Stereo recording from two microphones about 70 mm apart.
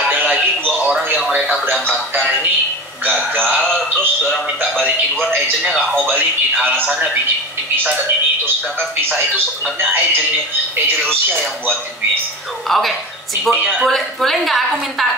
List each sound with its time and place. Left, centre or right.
0.1 s music: right
1.7 s speech: right
3.3 s music: right
4.6 s speech: right
9.8 s speech: right
11.0 s speech: centre